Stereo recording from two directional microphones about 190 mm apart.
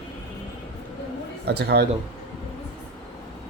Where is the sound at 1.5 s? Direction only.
60° right (ahead or behind).